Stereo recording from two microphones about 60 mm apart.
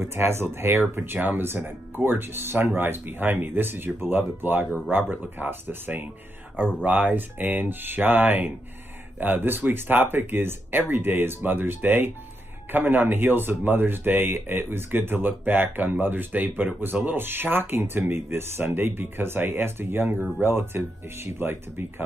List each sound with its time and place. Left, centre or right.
0.0 s speech: right